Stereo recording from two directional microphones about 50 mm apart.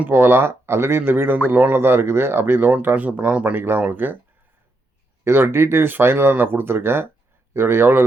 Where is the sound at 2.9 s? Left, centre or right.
Right.